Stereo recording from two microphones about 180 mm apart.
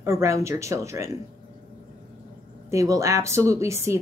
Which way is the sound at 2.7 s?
15° right (ahead or behind).